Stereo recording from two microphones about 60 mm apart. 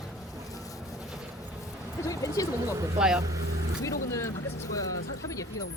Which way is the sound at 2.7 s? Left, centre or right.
Right.